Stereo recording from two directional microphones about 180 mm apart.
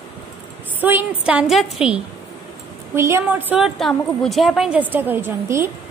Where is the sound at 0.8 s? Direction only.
10° right (ahead or behind).